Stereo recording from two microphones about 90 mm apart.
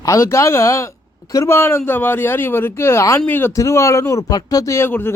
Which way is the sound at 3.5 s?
35° left (ahead or behind).